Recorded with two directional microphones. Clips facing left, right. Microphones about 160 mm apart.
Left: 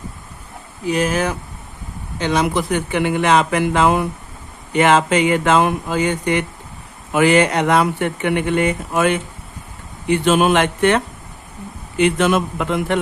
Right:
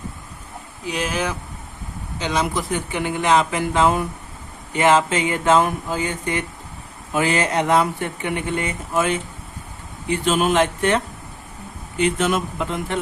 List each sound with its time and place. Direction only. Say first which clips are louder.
0.9 s speech: left 6 dB; 45° left (ahead or behind); by 13.0 s 70° left (ahead or behind)